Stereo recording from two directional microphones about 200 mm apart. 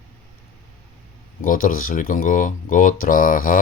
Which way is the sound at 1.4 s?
45° left (ahead or behind).